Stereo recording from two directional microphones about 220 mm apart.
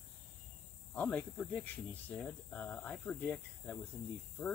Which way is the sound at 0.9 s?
5° left (ahead or behind).